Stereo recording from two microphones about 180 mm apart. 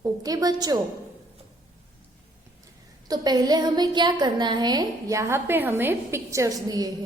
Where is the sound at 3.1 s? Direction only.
20° right (ahead or behind).